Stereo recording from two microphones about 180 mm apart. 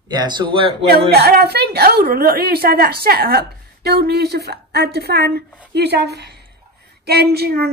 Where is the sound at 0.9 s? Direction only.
60° right (ahead or behind).